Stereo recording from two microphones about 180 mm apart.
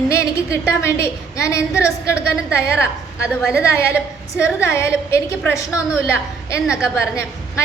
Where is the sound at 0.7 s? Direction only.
15° left (ahead or behind).